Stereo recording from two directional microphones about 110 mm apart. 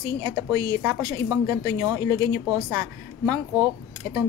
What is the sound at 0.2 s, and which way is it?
Speech, 35° right (ahead or behind).